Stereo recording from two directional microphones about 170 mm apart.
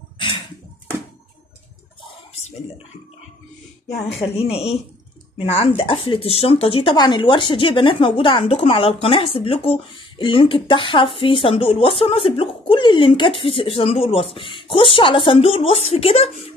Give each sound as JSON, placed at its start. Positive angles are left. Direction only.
{"t": 4.2, "sound": "speech", "side_deg": 35}